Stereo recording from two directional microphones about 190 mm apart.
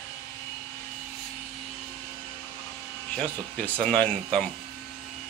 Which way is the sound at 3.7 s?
5° left (ahead or behind).